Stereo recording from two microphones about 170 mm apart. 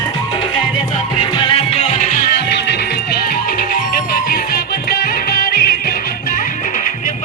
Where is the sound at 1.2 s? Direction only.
30° left (ahead or behind); by 2.2 s 45° left (ahead or behind).